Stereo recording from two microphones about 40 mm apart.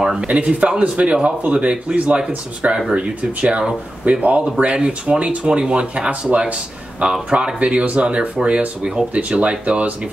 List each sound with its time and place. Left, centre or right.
0.0 s speech: centre
0.3 s speech: right
4.7 s speech: right